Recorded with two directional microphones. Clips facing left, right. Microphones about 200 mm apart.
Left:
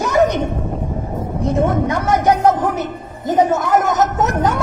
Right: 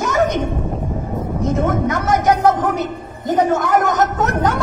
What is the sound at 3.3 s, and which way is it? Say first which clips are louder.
Speech: left 1 dB; 20° left (ahead or behind).